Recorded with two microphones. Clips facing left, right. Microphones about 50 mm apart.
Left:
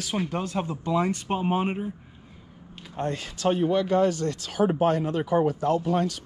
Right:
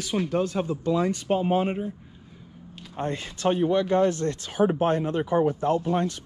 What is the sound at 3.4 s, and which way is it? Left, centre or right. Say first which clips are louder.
Speech: even; right.